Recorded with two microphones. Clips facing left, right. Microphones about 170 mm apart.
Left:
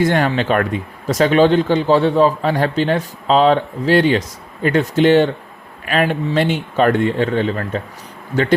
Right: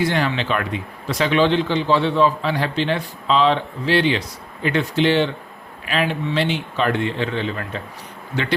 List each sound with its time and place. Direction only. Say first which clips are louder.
0.0 s speech: left 5 dB; 50° left (ahead or behind)